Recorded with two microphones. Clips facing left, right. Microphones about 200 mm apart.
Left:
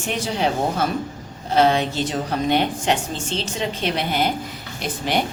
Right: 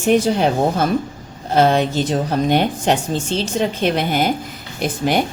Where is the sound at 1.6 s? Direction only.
45° right (ahead or behind).